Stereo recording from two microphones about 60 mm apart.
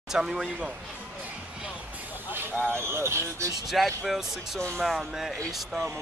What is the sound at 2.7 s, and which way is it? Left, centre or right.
Speech, right.